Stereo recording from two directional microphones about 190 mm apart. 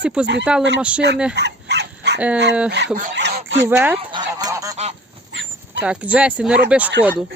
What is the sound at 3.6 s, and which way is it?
Speech, 10° right (ahead or behind).